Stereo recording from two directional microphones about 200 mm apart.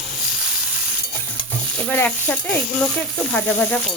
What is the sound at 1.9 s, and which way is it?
A woman's voice, 10° left (ahead or behind).